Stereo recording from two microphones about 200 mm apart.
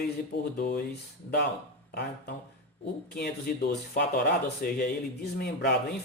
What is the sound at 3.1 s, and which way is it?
Speech, 50° left (ahead or behind).